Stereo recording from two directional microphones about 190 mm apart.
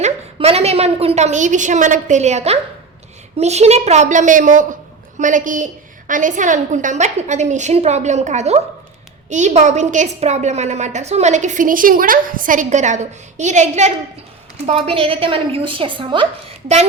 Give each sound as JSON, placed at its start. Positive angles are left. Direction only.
{"t": 0.0, "sound": "a woman's voice", "side_deg": -30}